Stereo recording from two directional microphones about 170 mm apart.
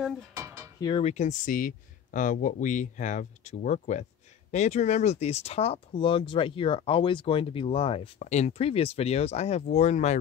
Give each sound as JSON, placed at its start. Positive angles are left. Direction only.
{"t": 0.4, "sound": "cutlery", "side_deg": -20}
{"t": 0.7, "sound": "speech", "side_deg": 25}
{"t": 1.0, "sound": "speech", "side_deg": 45}